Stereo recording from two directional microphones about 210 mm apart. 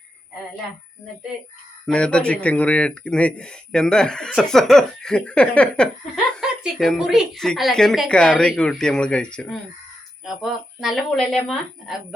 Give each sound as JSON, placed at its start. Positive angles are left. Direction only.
{"t": 1.9, "sound": "speech", "side_deg": 5}